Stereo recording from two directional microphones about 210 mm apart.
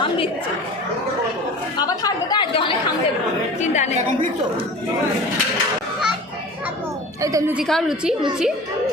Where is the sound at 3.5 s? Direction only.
35° left (ahead or behind).